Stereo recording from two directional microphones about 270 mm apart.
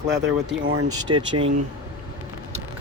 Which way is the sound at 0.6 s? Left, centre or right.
Right.